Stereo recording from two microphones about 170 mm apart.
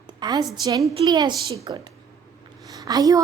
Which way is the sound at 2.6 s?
20° right (ahead or behind).